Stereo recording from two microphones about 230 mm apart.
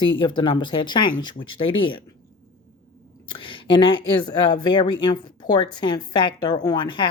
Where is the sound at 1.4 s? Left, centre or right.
Left.